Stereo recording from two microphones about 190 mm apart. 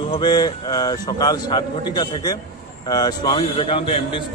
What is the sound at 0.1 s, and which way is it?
A man's voice, 20° left (ahead or behind).